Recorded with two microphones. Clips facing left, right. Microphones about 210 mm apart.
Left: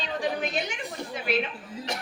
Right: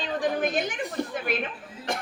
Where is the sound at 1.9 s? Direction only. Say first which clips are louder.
Right 4 dB; 50° right (ahead or behind).